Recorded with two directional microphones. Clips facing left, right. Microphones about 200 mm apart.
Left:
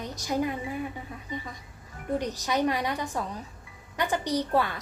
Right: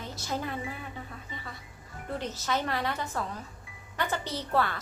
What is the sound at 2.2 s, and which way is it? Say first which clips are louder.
A woman's voice: left 4 dB; 15° left (ahead or behind).